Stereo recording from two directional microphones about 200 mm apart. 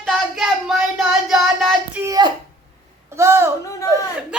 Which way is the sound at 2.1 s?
20° right (ahead or behind).